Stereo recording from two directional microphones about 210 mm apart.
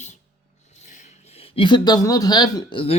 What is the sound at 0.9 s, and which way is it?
Speech, 35° left (ahead or behind).